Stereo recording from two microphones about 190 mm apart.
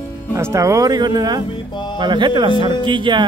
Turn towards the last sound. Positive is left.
turn(degrees=-25)  # may be behind; listen again after turning